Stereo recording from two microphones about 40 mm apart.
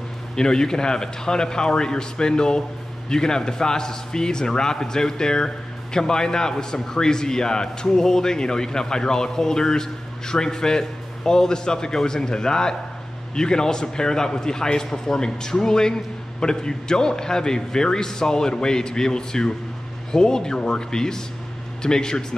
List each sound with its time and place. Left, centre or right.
0.4 s a man's voice: centre